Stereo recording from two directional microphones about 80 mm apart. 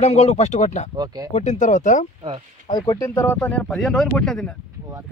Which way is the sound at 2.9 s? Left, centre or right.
Left.